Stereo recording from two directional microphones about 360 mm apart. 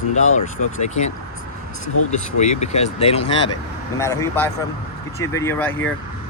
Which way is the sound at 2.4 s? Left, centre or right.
Centre.